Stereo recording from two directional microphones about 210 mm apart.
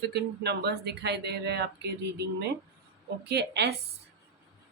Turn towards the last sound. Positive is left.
turn(degrees=-55)  # may be behind; listen again after turning